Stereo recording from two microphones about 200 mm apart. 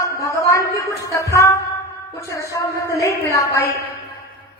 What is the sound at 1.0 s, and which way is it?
A woman's voice, 15° left (ahead or behind).